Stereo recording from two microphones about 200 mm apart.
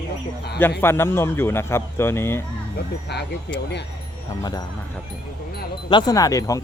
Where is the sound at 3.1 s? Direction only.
55° left (ahead or behind).